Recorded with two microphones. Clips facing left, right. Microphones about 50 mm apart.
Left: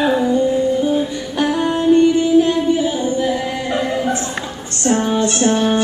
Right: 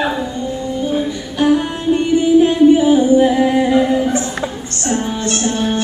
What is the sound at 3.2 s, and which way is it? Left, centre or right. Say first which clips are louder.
Singing: right 7 dB; right.